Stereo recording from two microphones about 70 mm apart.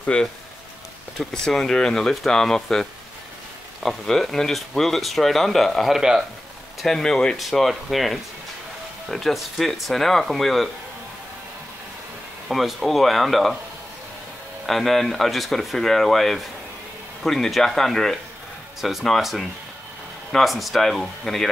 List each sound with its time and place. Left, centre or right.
0.0 s speech: centre
1.4 s speech: centre
6.8 s speech: centre
12.4 s speech: centre
14.7 s speech: centre